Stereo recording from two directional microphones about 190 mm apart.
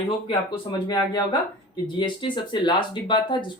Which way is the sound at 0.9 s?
20° left (ahead or behind).